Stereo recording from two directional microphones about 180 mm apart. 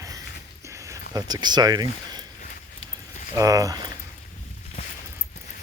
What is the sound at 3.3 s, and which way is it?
Speech, 20° right (ahead or behind).